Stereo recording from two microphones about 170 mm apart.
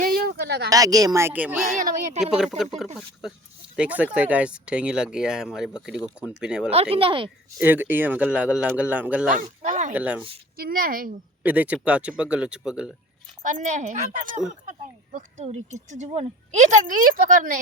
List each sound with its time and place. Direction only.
0.0 s a sound: 60° right (ahead or behind)
0.7 s speech: 20° right (ahead or behind); by 6.7 s 5° right (ahead or behind)
6.9 s speech: 30° right (ahead or behind)
7.6 s speech: 10° right (ahead or behind)
9.3 s a woman's voice: 50° right (ahead or behind)
9.9 s speech: 10° right (ahead or behind)
10.6 s speech: 60° right (ahead or behind)
11.4 s speech: 10° right (ahead or behind)
13.4 s a woman's voice: 50° right (ahead or behind)